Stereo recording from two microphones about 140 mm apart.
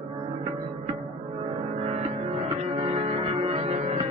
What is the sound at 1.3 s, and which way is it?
Music, 45° right (ahead or behind).